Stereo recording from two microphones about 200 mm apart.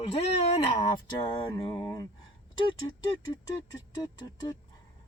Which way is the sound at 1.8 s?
10° left (ahead or behind).